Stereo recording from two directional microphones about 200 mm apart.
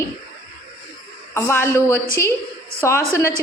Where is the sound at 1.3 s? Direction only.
15° left (ahead or behind).